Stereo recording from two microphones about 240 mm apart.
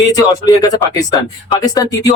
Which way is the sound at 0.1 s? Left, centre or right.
Centre.